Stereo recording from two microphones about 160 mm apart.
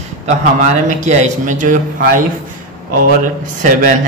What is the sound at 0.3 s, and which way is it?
Speech, 50° right (ahead or behind).